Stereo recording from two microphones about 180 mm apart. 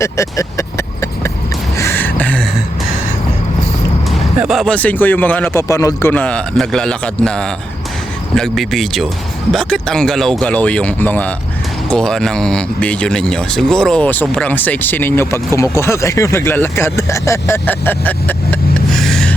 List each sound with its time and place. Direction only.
0.0 s vehicle: 15° left (ahead or behind)
1.7 s a sound: 15° left (ahead or behind)
4.4 s speech: centre (ahead or behind)